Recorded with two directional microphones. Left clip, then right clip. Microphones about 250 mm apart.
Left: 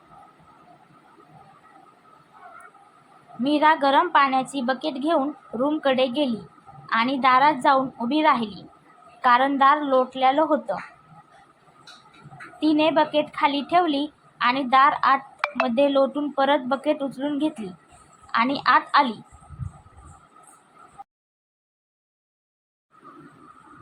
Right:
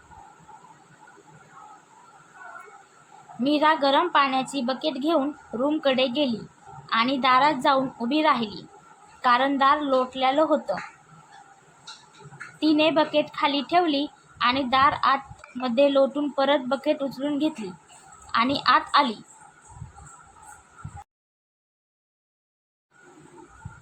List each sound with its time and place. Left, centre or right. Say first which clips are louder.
3.4 s a woman's voice: left 2 dB; centre
12.5 s a woman's voice: left 1 dB; centre